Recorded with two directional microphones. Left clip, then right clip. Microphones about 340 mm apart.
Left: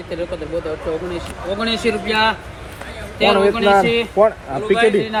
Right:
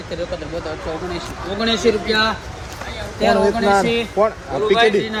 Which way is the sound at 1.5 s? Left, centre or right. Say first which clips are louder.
Right 3 dB; centre.